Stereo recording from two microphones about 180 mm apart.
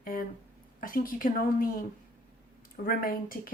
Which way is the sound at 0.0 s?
50° left (ahead or behind).